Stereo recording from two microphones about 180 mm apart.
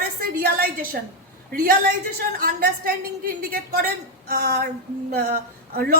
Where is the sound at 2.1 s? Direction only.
60° right (ahead or behind).